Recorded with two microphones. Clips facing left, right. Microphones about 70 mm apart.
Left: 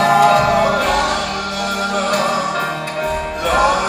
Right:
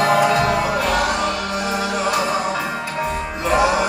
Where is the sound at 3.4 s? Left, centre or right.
Right.